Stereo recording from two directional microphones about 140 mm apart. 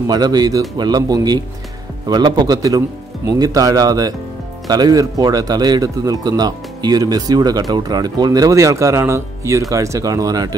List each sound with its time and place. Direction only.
0.0 s speech: 30° right (ahead or behind)